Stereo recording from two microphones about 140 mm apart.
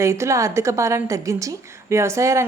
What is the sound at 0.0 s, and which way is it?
A woman's voice, 20° right (ahead or behind).